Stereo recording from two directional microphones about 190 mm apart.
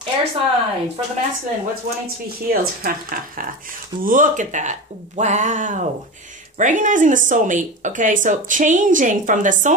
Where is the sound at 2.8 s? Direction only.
50° right (ahead or behind).